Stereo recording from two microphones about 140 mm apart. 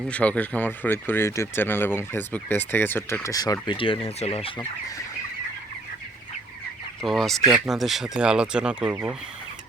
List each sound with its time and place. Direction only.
0.1 s speech: 10° left (ahead or behind); by 4.6 s 40° left (ahead or behind)
7.0 s speech: centre (ahead or behind)